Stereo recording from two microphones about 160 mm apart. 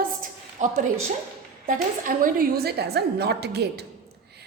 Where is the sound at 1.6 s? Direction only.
60° right (ahead or behind).